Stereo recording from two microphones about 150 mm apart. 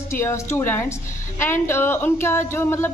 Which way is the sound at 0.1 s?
20° left (ahead or behind).